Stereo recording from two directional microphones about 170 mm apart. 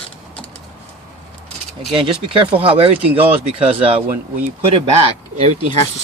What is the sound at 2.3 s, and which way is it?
Speech, 35° right (ahead or behind).